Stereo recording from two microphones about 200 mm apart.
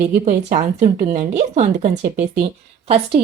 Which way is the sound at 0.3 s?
40° right (ahead or behind).